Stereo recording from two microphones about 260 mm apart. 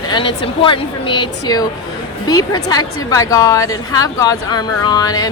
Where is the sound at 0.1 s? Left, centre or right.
Centre.